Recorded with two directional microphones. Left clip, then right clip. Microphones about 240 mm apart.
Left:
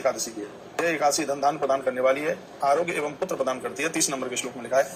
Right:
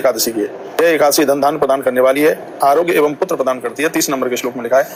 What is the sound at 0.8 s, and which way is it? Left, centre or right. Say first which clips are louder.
A man's voice: right 12 dB; right.